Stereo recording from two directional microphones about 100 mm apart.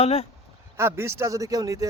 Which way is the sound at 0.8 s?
25° right (ahead or behind).